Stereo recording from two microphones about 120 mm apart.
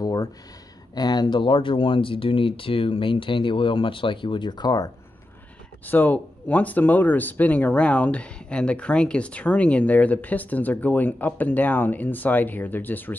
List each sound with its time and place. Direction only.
0.0 s a sound: 30° left (ahead or behind)
0.9 s speech: 35° left (ahead or behind)
5.9 s speech: 15° left (ahead or behind)